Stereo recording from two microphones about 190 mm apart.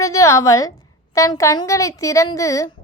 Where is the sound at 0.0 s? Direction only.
15° left (ahead or behind).